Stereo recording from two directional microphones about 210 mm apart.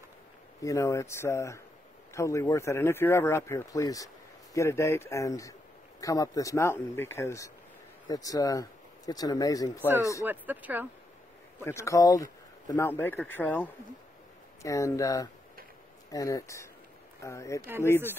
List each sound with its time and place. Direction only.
0.6 s speech: 15° left (ahead or behind)
10.2 s speech: 10° right (ahead or behind)
11.6 s speech: 15° left (ahead or behind)